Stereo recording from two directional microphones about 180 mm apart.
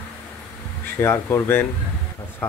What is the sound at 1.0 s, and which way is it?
Speech, 15° left (ahead or behind).